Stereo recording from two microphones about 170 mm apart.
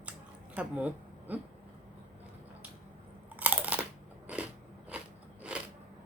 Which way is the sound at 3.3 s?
10° right (ahead or behind).